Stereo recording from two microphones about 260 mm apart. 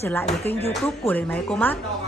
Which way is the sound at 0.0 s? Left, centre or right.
Centre.